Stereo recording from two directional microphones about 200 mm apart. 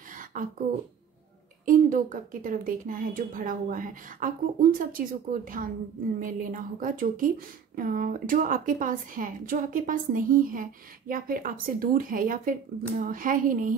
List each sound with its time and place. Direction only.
0.1 s beatboxing: 40° right (ahead or behind)
1.7 s speech: 40° right (ahead or behind)